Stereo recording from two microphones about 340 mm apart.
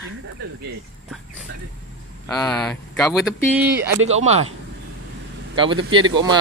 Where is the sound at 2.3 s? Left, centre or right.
Centre.